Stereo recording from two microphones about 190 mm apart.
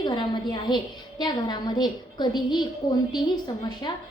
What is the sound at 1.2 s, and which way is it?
A woman's voice, 25° left (ahead or behind).